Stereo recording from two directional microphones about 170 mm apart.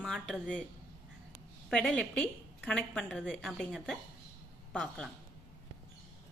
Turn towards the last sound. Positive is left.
turn(degrees=5)  # may be behind; listen again after turning